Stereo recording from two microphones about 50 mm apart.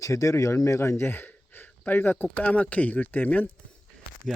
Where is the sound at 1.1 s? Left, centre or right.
Left.